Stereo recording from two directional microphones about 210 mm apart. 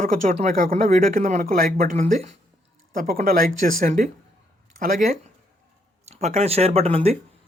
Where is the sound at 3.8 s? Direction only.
40° right (ahead or behind).